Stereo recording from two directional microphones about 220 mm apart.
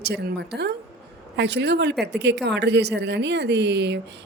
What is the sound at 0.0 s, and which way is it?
Speech, 50° right (ahead or behind).